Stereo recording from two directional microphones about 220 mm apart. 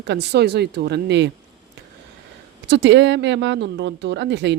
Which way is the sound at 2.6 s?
55° right (ahead or behind).